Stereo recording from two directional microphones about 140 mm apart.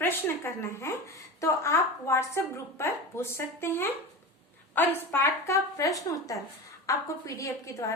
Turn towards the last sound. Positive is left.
turn(degrees=20)  # may be behind; listen again after turning